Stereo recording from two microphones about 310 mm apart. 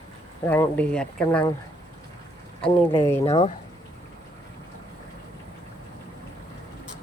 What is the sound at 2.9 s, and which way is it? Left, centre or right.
Speech, centre.